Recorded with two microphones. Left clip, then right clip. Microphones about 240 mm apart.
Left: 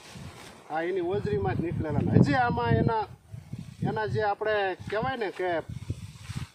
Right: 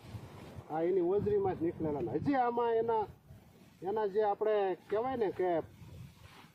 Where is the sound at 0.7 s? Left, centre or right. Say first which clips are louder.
Left 2 dB; left.